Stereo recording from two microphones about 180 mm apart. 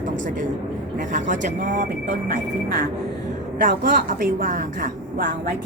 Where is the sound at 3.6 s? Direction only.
50° right (ahead or behind).